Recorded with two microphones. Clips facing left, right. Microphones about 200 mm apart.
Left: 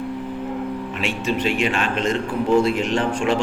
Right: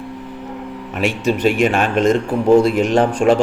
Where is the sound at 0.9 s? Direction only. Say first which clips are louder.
Right 7 dB; 45° right (ahead or behind).